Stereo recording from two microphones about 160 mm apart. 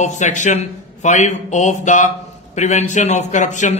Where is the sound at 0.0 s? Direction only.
50° left (ahead or behind).